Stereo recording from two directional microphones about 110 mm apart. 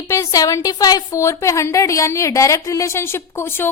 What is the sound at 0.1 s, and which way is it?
A woman's voice, 30° left (ahead or behind).